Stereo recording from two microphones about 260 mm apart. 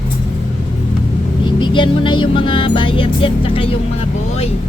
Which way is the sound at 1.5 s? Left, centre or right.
Centre.